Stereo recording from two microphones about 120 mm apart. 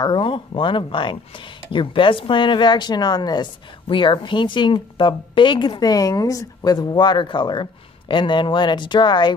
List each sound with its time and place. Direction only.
0.0 s a woman's voice: 45° left (ahead or behind)